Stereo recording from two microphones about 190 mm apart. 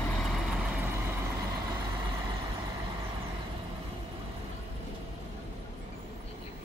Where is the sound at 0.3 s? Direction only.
5° right (ahead or behind).